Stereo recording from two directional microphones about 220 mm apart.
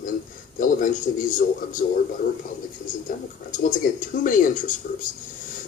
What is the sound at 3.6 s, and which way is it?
Speech, 35° left (ahead or behind).